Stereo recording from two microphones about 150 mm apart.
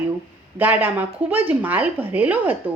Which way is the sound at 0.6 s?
10° right (ahead or behind).